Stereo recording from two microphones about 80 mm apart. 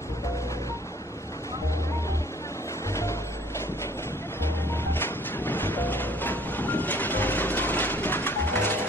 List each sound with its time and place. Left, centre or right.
2.9 s music: left
4.6 s music: left